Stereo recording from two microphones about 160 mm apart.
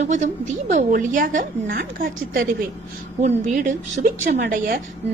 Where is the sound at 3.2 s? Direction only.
50° right (ahead or behind).